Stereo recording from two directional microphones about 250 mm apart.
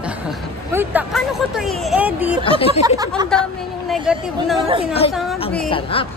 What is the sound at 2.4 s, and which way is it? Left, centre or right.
Speech, left.